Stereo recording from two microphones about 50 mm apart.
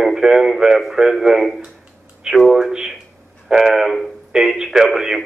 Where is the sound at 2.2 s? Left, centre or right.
Centre.